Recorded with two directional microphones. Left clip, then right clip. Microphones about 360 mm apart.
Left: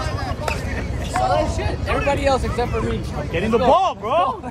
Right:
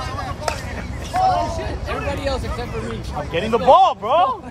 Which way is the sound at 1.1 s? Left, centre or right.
Centre.